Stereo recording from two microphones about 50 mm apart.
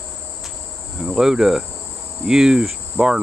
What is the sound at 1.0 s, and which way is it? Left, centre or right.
Cricket, centre.